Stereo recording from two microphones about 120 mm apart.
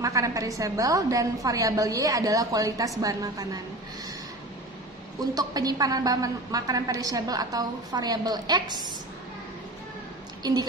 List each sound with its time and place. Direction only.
0.0 s a woman's voice: 25° right (ahead or behind)
5.2 s a woman's voice: 30° right (ahead or behind)
10.4 s a woman's voice: 35° right (ahead or behind)